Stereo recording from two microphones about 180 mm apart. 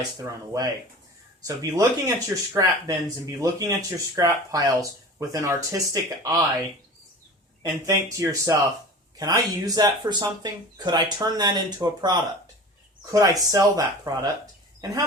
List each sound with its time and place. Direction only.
0.2 s speech: 20° right (ahead or behind)
7.6 s speech: 20° right (ahead or behind)